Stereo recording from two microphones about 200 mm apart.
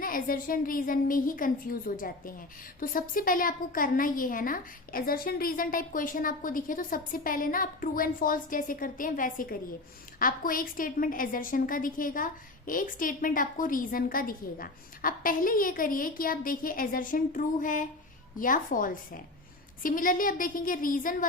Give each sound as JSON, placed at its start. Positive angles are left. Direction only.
{"t": 0.0, "sound": "a woman's voice", "side_deg": 45}